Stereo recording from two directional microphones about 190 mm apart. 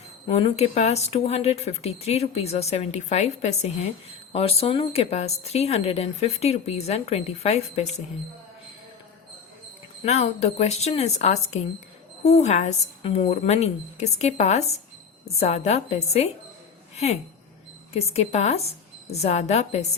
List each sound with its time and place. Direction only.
0.3 s a woman's voice: 30° left (ahead or behind)
10.1 s a woman's voice: 35° left (ahead or behind)
17.9 s a woman's voice: 35° left (ahead or behind)